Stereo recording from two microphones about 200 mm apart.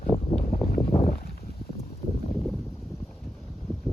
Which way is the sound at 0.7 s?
50° left (ahead or behind).